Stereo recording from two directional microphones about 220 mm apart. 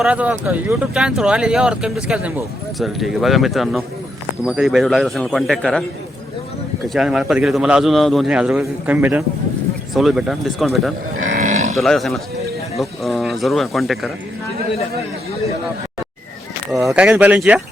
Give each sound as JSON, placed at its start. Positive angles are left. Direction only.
{"t": 0.0, "sound": "speech", "side_deg": -5}
{"t": 6.8, "sound": "speech", "side_deg": 0}
{"t": 11.3, "sound": "cattle", "side_deg": -35}
{"t": 11.7, "sound": "speech", "side_deg": 0}
{"t": 16.8, "sound": "speech", "side_deg": -5}